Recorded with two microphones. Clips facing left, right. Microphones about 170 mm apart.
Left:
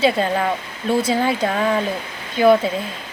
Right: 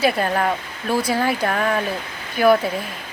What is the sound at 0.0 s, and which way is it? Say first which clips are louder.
Speech: left 1 dB; 25° left (ahead or behind).